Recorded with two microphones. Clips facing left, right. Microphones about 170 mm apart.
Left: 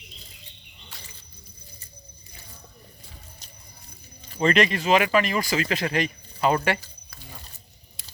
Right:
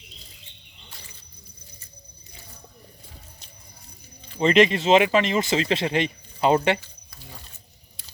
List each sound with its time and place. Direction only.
4.4 s speech: 25° right (ahead or behind)